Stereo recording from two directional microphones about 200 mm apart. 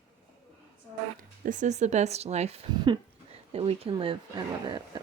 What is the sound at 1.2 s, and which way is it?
Speech, 40° right (ahead or behind).